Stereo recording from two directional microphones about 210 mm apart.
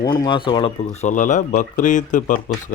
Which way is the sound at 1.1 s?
35° left (ahead or behind).